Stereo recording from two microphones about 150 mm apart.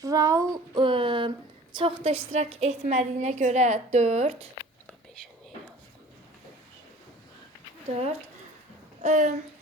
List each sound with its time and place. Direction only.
0.0 s child singing: 25° right (ahead or behind)
1.7 s a woman's voice: 35° right (ahead or behind)
9.0 s a sound: 55° right (ahead or behind)